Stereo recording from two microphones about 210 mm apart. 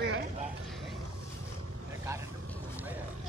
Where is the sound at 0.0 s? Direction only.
60° right (ahead or behind).